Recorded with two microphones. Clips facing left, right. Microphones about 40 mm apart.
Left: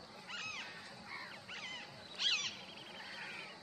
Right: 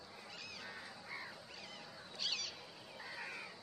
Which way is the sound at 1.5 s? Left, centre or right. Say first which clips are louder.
Left 5 dB; left.